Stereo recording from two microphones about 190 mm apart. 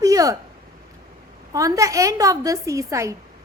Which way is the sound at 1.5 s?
15° right (ahead or behind).